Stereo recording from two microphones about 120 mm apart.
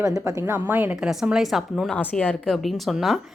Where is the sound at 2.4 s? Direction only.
Centre (ahead or behind).